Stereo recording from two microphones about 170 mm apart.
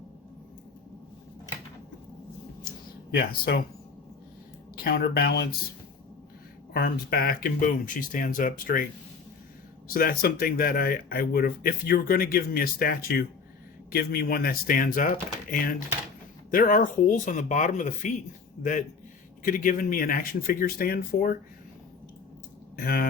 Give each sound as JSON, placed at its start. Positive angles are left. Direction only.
{"t": 3.2, "sound": "speech", "side_deg": 65}
{"t": 4.8, "sound": "speech", "side_deg": 65}
{"t": 6.7, "sound": "speech", "side_deg": 60}
{"t": 9.9, "sound": "speech", "side_deg": 60}
{"t": 22.7, "sound": "speech", "side_deg": 60}